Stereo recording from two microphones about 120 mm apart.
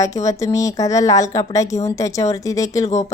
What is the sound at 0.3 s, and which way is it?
A woman's voice, 25° left (ahead or behind).